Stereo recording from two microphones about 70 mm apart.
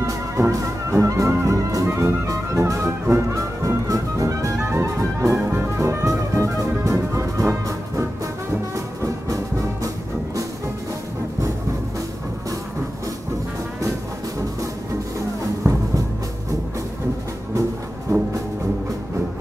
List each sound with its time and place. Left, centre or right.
0.0 s music: right
3.6 s music: right
8.7 s music: right
18.1 s music: right